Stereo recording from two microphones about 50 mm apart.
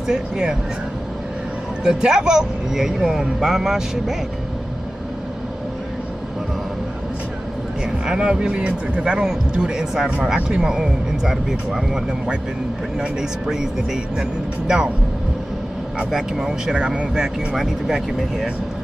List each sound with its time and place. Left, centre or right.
0.1 s speech: centre
1.9 s speech: centre
8.1 s speech: centre
13.0 s speech: centre
16.1 s speech: centre